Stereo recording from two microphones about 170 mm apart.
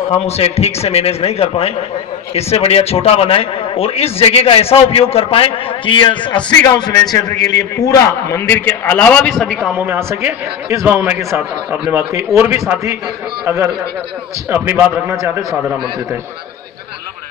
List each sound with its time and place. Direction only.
0.3 s a man's voice: 35° left (ahead or behind); by 9.7 s 5° left (ahead or behind)
9.7 s a man's voice: 10° right (ahead or behind)
14.5 s a man's voice: 10° right (ahead or behind)